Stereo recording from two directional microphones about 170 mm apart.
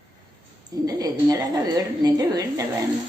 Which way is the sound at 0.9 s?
20° right (ahead or behind).